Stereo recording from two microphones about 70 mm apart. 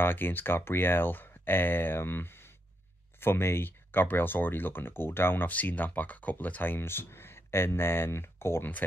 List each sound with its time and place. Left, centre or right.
0.0 s speech: left